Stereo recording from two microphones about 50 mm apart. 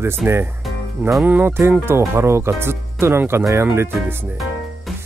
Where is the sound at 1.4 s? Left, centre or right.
Right.